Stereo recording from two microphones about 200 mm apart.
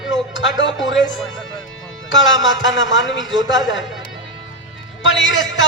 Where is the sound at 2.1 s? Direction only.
70° left (ahead or behind).